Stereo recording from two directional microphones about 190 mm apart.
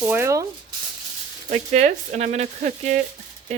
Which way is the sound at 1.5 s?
40° right (ahead or behind).